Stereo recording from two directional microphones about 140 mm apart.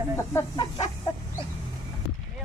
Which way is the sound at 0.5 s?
35° left (ahead or behind).